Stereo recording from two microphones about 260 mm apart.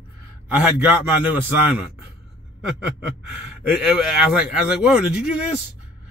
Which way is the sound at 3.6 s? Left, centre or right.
Centre.